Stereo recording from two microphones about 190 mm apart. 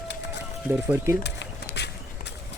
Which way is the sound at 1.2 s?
65° left (ahead or behind).